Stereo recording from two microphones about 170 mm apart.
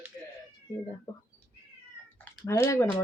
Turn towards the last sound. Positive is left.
turn(degrees=15)  # may be behind; listen again after turning